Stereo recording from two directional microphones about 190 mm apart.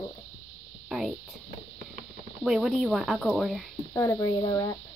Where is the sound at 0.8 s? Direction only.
Centre (ahead or behind).